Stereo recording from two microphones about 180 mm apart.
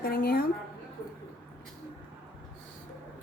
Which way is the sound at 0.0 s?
60° left (ahead or behind).